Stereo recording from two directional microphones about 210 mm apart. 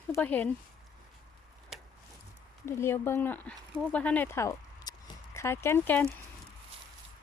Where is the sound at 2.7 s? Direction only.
10° left (ahead or behind).